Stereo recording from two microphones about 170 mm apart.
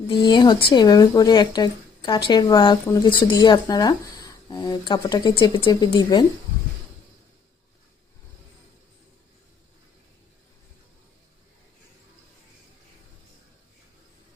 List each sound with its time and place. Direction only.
0.1 s speech: 25° left (ahead or behind)